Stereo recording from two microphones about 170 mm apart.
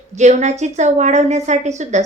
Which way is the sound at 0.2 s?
45° right (ahead or behind).